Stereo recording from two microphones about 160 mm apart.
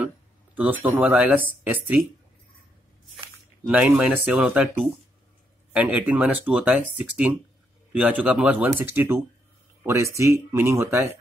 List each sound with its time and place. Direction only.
0.6 s speech: 10° right (ahead or behind)
3.6 s speech: 10° right (ahead or behind)
5.7 s speech: 10° right (ahead or behind)